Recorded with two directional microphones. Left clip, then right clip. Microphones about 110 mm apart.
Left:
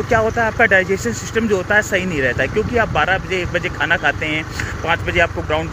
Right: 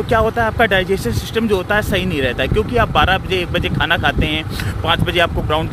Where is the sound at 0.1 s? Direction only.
30° right (ahead or behind).